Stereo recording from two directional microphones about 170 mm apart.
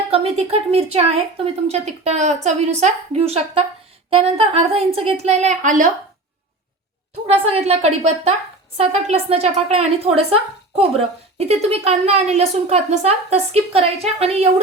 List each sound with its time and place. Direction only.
0.1 s a woman's voice: 35° right (ahead or behind)
7.3 s a woman's voice: 35° right (ahead or behind)